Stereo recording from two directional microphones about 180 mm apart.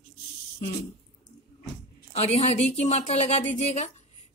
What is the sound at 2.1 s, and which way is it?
A woman's voice, 35° left (ahead or behind).